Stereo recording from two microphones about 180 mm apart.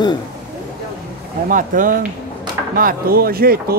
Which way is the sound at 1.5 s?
50° right (ahead or behind).